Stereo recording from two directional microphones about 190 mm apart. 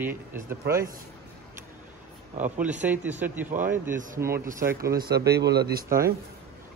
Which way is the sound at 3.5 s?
45° right (ahead or behind).